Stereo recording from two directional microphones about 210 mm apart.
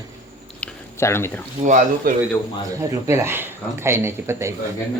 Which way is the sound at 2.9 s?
15° right (ahead or behind).